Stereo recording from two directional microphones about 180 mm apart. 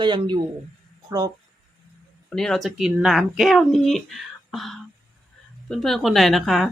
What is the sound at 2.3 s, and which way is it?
Speech, 5° left (ahead or behind).